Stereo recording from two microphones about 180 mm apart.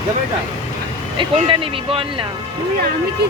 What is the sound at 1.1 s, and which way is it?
Speech, 30° right (ahead or behind).